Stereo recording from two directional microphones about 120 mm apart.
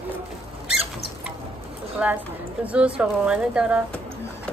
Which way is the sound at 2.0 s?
10° right (ahead or behind).